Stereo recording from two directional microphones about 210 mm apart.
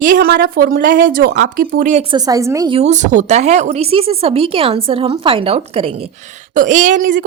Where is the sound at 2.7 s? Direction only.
35° right (ahead or behind).